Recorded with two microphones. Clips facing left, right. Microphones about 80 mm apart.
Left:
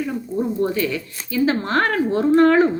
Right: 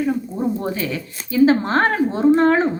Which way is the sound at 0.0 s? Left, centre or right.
Right.